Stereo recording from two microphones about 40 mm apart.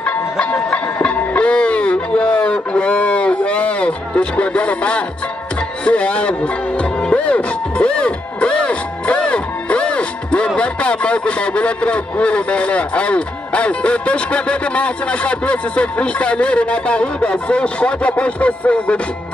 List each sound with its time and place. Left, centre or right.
0.0 s music: left
5.9 s speech: left